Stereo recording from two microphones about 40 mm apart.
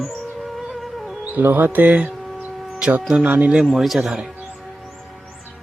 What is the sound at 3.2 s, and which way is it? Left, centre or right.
Speech, right.